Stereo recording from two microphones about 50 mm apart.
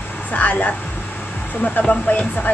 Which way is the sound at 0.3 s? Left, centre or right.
Left.